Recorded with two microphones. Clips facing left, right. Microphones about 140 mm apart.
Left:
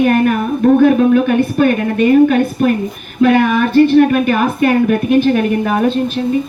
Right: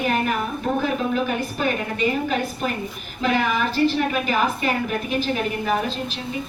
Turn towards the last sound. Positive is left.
turn(degrees=55)  # may be behind; listen again after turning